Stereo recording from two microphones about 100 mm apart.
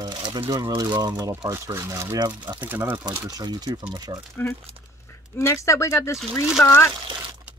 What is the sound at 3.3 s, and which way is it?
Speech, 40° right (ahead or behind).